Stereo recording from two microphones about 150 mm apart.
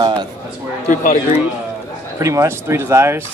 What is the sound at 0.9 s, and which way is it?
Speech, 55° left (ahead or behind).